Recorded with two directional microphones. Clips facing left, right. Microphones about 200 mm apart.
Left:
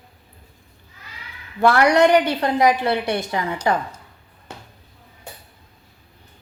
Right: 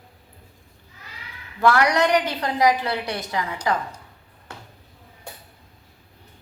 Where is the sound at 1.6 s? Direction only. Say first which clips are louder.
Left 4 dB; 30° left (ahead or behind).